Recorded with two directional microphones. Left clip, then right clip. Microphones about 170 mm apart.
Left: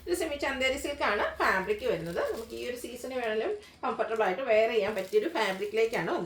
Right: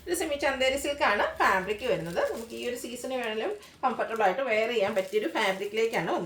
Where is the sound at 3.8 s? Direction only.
15° right (ahead or behind).